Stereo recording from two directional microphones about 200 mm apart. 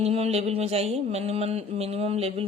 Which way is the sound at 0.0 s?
30° right (ahead or behind).